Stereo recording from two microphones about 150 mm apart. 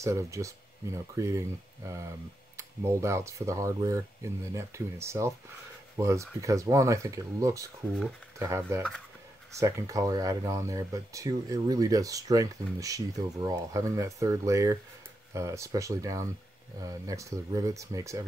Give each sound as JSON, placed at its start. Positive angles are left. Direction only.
{"t": 0.0, "sound": "speech", "side_deg": -20}